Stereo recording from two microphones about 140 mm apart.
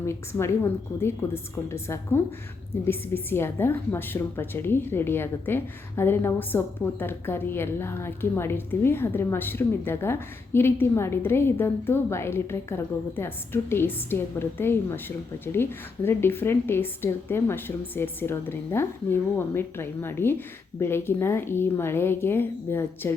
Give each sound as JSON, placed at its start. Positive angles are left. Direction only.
{"t": 0.0, "sound": "a woman's voice", "side_deg": 20}